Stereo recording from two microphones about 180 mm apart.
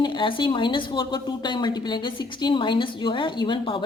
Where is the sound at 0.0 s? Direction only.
25° left (ahead or behind).